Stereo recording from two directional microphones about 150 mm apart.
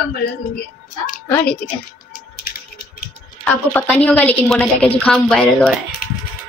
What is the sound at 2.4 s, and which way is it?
Typing, 75° left (ahead or behind).